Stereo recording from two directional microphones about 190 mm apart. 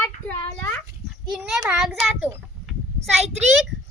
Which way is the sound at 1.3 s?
Centre (ahead or behind).